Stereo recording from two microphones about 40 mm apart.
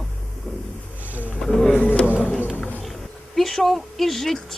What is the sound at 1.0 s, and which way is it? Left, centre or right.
Wild animals, right.